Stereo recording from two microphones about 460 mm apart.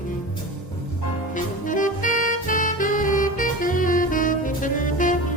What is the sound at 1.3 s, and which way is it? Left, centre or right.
Music, centre.